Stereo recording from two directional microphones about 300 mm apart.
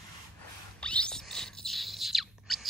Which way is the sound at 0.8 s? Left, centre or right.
Centre.